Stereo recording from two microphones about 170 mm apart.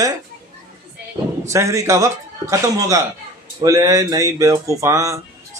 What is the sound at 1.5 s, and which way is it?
Speech, 20° right (ahead or behind).